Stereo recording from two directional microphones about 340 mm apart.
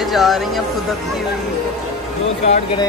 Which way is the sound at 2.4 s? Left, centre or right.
Centre.